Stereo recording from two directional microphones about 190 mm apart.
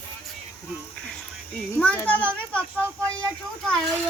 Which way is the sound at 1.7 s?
10° left (ahead or behind).